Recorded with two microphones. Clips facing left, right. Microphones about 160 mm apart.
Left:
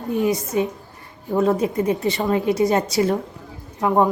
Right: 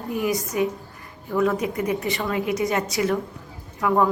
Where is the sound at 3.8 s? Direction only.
25° left (ahead or behind).